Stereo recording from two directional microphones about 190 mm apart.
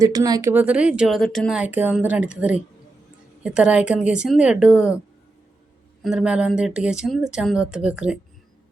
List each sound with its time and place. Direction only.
0.0 s speech: 20° right (ahead or behind)
0.5 s speech: 5° right (ahead or behind)
6.0 s speech: 5° right (ahead or behind)